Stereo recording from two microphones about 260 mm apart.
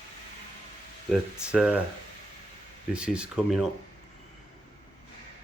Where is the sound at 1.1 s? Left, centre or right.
Centre.